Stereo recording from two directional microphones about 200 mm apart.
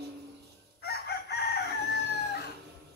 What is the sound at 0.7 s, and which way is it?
Chicken, 55° left (ahead or behind).